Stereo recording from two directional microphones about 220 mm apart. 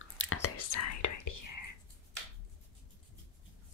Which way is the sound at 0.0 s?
70° left (ahead or behind).